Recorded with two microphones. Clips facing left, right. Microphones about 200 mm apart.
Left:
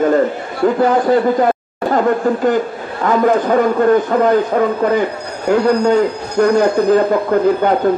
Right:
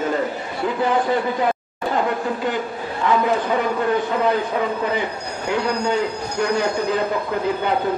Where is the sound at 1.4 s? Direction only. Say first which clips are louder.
Left 7 dB; 45° left (ahead or behind).